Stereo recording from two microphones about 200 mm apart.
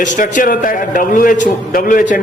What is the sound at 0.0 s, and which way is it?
A man's voice, 40° left (ahead or behind).